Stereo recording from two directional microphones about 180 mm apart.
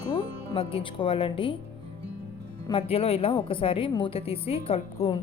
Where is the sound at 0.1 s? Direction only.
30° left (ahead or behind).